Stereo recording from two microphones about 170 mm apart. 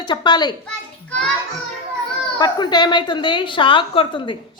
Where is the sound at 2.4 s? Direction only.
25° left (ahead or behind).